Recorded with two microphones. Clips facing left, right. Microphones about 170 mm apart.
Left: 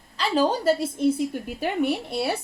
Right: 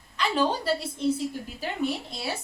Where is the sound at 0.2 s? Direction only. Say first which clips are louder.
Left 3 dB; 40° left (ahead or behind).